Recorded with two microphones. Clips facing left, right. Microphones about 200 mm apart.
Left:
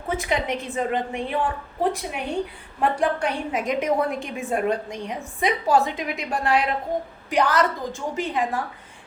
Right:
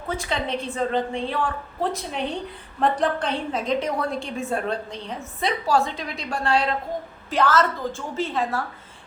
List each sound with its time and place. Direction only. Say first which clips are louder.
0.2 s a woman's voice: left 2 dB; 15° left (ahead or behind)